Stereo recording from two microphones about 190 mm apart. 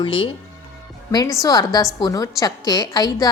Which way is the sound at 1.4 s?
20° left (ahead or behind).